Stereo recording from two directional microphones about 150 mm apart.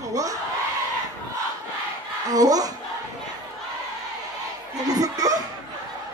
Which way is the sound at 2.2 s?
25° right (ahead or behind).